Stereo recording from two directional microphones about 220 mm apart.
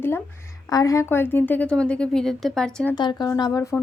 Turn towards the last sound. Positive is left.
turn(degrees=15)  # may be behind; listen again after turning